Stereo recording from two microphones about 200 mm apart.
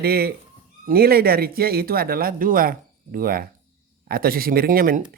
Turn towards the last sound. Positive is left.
turn(degrees=-45)  # may be behind; listen again after turning